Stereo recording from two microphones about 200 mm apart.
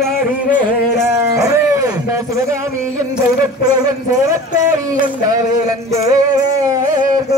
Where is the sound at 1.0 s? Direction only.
15° right (ahead or behind).